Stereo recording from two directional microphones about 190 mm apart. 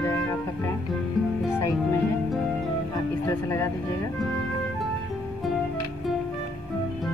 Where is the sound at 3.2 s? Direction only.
15° left (ahead or behind).